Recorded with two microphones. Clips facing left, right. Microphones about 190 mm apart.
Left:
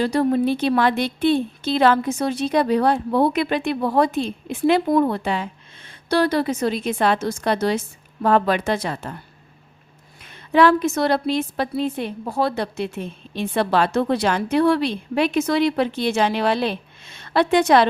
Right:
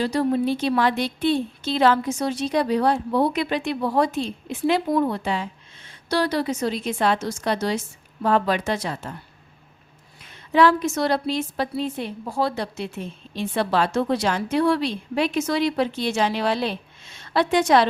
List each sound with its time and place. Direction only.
0.0 s a woman's voice: 55° left (ahead or behind)
10.5 s a woman's voice: 60° left (ahead or behind)